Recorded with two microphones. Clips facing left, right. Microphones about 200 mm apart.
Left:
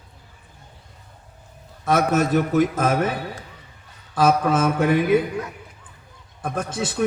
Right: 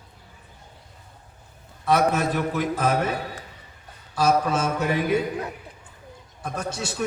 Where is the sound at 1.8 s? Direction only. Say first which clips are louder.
Left 2 dB; 45° left (ahead or behind).